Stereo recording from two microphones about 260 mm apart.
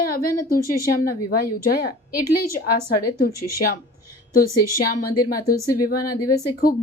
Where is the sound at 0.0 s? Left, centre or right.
Left.